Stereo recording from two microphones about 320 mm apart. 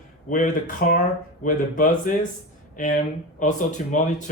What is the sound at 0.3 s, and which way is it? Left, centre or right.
A man's voice, left.